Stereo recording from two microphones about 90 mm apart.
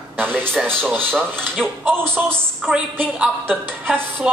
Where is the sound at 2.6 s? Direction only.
10° right (ahead or behind).